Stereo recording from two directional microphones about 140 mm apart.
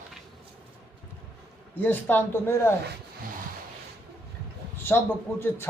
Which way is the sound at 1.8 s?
15° left (ahead or behind).